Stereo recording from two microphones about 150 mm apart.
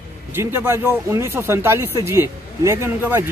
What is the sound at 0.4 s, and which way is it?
Speech, 20° right (ahead or behind).